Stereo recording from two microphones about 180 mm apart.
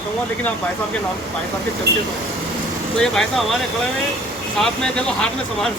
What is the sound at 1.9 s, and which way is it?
Speech, 65° right (ahead or behind).